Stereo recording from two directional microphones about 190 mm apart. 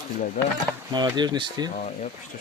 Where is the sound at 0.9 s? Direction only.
25° right (ahead or behind).